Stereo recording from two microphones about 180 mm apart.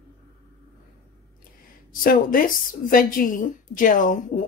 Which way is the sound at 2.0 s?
50° left (ahead or behind).